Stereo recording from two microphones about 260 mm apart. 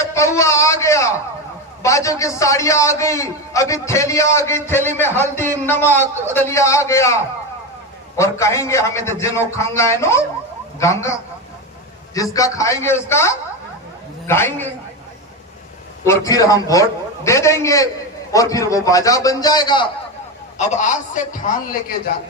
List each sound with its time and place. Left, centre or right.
0.0 s a man's voice: centre
12.1 s a man's voice: centre
16.0 s a man's voice: centre
20.6 s a man's voice: left